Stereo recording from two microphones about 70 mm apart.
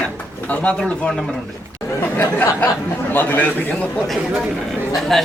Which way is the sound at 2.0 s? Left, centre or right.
Left.